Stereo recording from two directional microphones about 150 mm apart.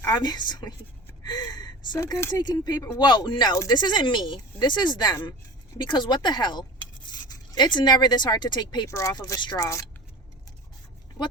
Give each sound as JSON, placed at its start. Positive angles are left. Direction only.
{"t": 0.0, "sound": "speech", "side_deg": 25}